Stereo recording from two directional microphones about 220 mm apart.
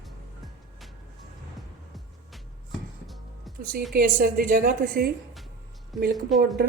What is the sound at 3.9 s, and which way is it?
A woman's voice, 40° right (ahead or behind).